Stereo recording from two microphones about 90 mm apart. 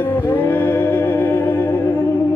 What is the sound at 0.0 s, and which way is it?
Music, 25° left (ahead or behind).